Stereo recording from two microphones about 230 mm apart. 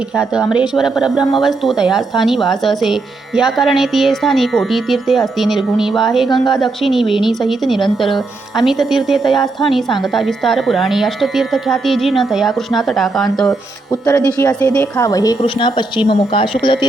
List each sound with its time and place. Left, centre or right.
0.5 s speech: centre
13.9 s a woman's voice: centre